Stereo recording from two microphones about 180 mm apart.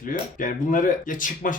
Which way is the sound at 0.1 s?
50° left (ahead or behind).